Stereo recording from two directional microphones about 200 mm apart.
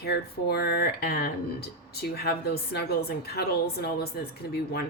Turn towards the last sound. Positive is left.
turn(degrees=50)  # may be behind; listen again after turning